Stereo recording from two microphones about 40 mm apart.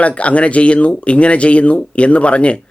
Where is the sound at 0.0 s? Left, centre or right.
Left.